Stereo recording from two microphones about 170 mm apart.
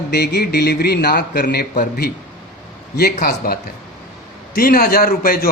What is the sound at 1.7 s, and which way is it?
Speech, 60° left (ahead or behind).